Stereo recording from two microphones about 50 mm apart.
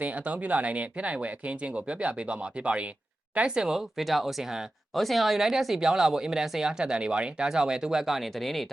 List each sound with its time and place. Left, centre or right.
0.0 s speech: right; by 8.7 s centre